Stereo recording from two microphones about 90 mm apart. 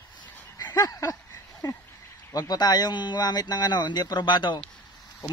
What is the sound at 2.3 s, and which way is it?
Speech, 45° left (ahead or behind).